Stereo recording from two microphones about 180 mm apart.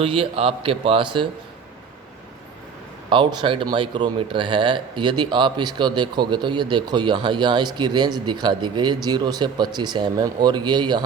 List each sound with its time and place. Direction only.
0.0 s speech: 30° right (ahead or behind)
3.1 s speech: 30° right (ahead or behind)